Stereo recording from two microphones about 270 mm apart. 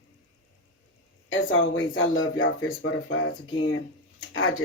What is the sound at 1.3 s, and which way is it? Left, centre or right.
Speech, left.